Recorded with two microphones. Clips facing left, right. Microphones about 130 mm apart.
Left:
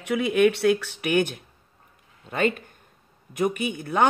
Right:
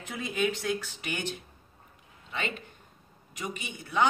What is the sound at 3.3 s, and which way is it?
Speech, 55° left (ahead or behind).